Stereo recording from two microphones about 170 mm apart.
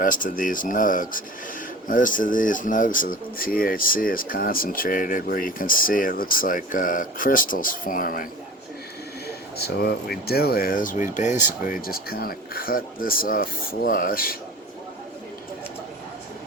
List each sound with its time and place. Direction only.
0.0 s speech: 50° left (ahead or behind)
9.2 s speech: 70° left (ahead or behind)